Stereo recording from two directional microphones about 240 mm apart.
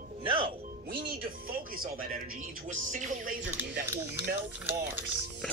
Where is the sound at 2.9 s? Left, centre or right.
Right.